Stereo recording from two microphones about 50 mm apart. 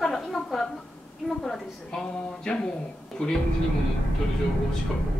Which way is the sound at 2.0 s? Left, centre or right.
Left.